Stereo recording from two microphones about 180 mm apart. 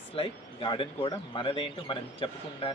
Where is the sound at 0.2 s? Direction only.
30° left (ahead or behind).